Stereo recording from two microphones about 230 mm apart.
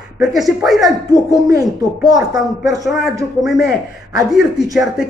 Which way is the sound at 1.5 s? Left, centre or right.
Centre.